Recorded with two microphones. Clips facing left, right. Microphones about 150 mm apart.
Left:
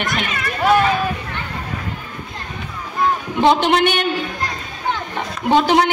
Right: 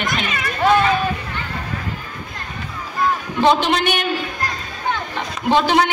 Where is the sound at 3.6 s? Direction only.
55° left (ahead or behind).